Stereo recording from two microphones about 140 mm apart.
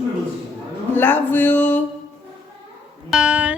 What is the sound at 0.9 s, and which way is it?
Speech, 15° left (ahead or behind).